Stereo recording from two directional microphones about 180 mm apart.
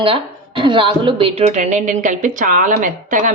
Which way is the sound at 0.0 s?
30° right (ahead or behind).